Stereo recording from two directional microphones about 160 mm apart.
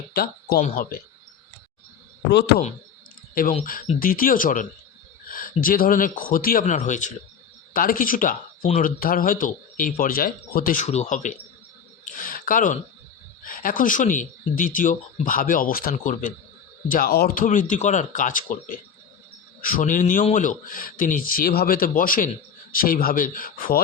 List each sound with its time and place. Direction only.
0.1 s speech: 70° left (ahead or behind)
4.0 s speech: 60° left (ahead or behind)
7.7 s speech: 60° left (ahead or behind)
12.1 s a sound: 60° left (ahead or behind)
13.4 s speech: 60° left (ahead or behind)